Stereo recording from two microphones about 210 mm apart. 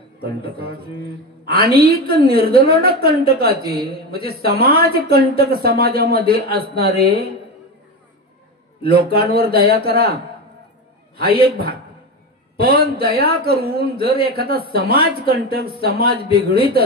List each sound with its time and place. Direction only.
0.2 s a woman's voice: 45° right (ahead or behind)
8.8 s a woman's voice: 45° right (ahead or behind)
11.4 s a woman's voice: 45° right (ahead or behind)